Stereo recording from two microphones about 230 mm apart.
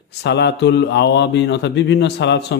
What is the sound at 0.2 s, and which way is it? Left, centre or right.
A man's voice, left.